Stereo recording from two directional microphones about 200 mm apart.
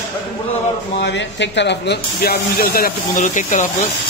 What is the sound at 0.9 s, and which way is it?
Speech, 60° left (ahead or behind).